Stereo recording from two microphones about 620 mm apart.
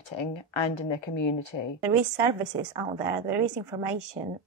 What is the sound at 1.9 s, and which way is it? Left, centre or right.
A woman's voice, right.